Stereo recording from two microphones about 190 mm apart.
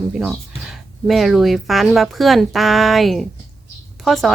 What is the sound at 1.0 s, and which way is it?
Speech, centre (ahead or behind).